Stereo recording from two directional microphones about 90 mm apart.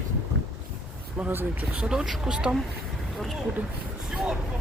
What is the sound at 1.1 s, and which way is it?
Speech, 20° right (ahead or behind).